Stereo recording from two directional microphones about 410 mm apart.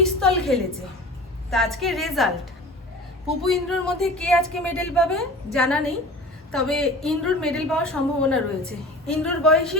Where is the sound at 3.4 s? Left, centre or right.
Centre.